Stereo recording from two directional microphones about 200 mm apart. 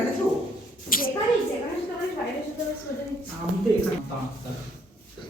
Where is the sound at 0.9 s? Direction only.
45° left (ahead or behind).